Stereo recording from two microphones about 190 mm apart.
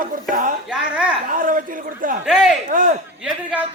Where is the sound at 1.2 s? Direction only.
45° right (ahead or behind).